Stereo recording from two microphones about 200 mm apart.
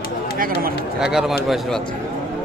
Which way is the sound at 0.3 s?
45° right (ahead or behind).